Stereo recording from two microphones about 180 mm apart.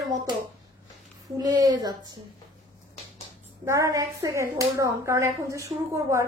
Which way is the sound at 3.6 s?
15° right (ahead or behind).